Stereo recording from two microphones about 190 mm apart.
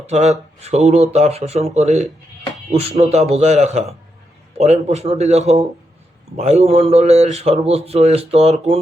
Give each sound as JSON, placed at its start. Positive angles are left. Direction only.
{"t": 0.1, "sound": "a man's voice", "side_deg": -35}